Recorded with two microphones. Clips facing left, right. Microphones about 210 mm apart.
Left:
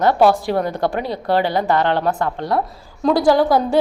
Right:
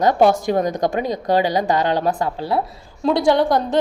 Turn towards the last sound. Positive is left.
turn(degrees=5)  # may be behind; listen again after turning